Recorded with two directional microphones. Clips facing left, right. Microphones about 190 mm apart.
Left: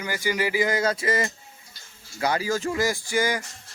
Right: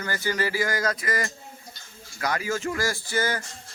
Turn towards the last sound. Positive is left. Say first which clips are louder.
# left 2 dB
turn(degrees=15)  # may be behind; listen again after turning